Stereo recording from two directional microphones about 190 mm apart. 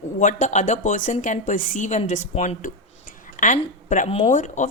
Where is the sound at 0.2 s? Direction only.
40° left (ahead or behind).